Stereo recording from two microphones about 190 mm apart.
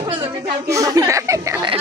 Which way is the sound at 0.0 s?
20° right (ahead or behind).